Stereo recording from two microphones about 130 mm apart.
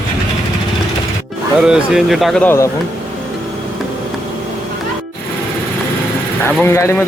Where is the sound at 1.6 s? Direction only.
5° right (ahead or behind).